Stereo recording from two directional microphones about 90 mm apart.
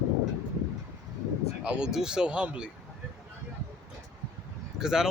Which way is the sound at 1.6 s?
10° right (ahead or behind).